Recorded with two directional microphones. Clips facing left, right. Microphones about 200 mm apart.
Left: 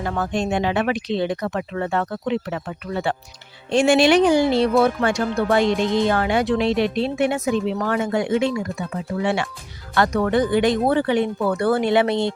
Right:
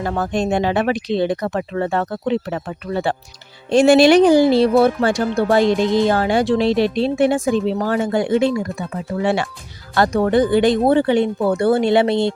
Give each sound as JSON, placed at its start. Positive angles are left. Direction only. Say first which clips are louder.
{"t": 0.0, "sound": "speech", "louder": "right 3 dB", "side_deg": -35}